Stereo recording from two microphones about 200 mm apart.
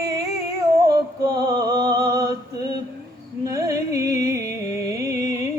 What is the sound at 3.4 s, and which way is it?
Music, 15° right (ahead or behind).